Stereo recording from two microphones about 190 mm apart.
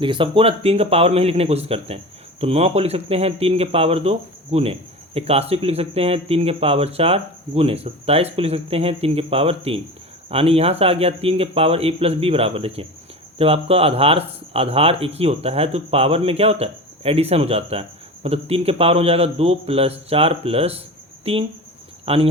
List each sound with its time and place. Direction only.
0.0 s speech: 25° right (ahead or behind)